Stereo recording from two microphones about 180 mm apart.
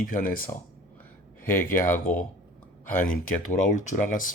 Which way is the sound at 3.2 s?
45° left (ahead or behind).